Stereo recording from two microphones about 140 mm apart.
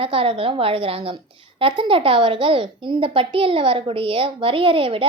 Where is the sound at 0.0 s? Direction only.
40° right (ahead or behind).